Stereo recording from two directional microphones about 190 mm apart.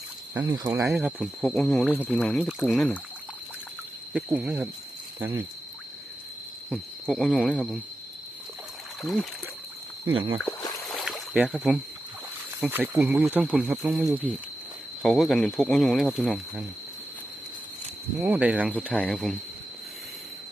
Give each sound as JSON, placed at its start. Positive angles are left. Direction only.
{"t": 0.3, "sound": "speech", "side_deg": -20}
{"t": 1.2, "sound": "speech", "side_deg": 5}
{"t": 4.1, "sound": "speech", "side_deg": -10}
{"t": 6.7, "sound": "speech", "side_deg": 0}
{"t": 9.0, "sound": "speech", "side_deg": 0}
{"t": 10.1, "sound": "speech", "side_deg": -25}
{"t": 10.8, "sound": "rowboat", "side_deg": 0}
{"t": 12.5, "sound": "speech", "side_deg": -10}
{"t": 18.2, "sound": "speech", "side_deg": -10}
{"t": 18.9, "sound": "speech", "side_deg": 5}